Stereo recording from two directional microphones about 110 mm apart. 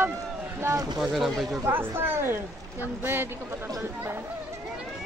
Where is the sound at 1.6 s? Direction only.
20° right (ahead or behind).